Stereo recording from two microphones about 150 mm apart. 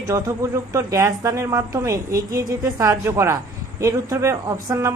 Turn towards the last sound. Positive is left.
turn(degrees=-20)  # may be behind; listen again after turning